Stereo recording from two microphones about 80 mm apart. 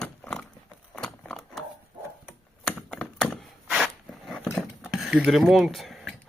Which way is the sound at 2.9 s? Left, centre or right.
Centre.